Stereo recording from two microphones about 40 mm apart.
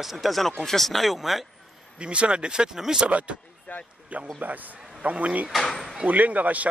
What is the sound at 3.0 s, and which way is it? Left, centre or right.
Speech, right.